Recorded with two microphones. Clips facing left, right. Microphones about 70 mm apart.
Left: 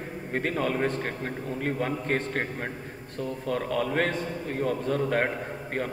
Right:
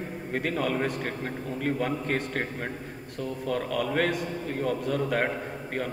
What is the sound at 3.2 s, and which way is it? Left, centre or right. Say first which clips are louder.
A man's voice: even; centre.